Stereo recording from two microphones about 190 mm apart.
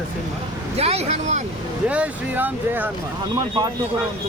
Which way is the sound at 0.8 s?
35° right (ahead or behind).